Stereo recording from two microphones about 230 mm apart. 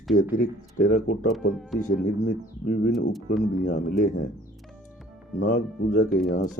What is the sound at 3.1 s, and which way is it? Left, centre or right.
Speech, centre.